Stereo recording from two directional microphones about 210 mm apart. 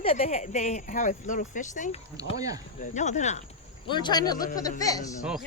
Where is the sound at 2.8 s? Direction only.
35° left (ahead or behind).